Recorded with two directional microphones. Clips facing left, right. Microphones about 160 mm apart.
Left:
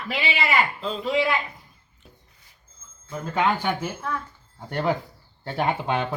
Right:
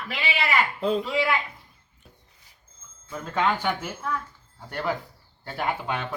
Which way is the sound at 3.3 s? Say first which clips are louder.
Left 1 dB; 15° left (ahead or behind).